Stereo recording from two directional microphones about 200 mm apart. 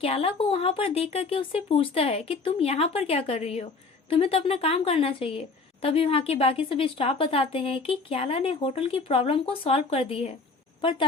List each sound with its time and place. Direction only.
0.0 s a woman's voice: 30° left (ahead or behind)